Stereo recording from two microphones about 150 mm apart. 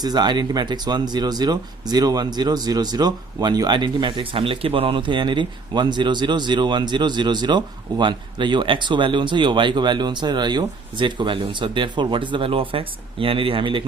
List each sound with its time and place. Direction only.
0.0 s speech: 25° right (ahead or behind)